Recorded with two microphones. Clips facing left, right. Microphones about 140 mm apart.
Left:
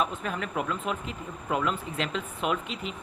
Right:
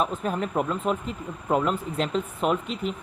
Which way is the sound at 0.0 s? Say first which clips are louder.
Right 4 dB; 40° right (ahead or behind).